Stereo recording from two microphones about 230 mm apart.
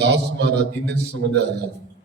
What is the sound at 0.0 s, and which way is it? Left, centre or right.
Speech, right.